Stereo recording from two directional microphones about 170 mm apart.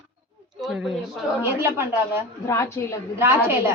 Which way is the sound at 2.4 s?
15° left (ahead or behind).